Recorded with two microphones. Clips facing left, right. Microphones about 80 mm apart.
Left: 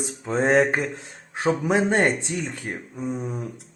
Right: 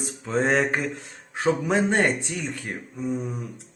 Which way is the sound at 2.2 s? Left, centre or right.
Left.